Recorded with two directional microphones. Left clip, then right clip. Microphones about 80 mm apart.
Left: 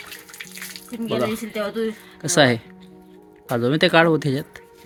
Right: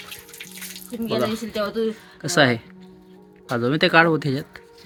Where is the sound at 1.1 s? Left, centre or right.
Left.